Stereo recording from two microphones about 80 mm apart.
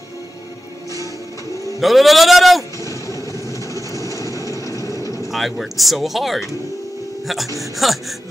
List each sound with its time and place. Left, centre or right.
1.8 s speech: centre
2.8 s vehicle: left
5.3 s speech: centre
7.8 s speech: centre